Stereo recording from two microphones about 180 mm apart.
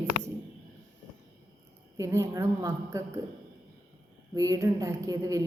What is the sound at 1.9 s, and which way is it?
A woman's voice, 15° right (ahead or behind).